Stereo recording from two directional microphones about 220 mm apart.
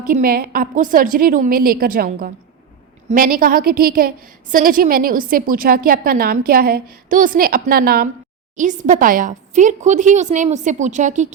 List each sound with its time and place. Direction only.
0.0 s a woman's voice: 40° right (ahead or behind)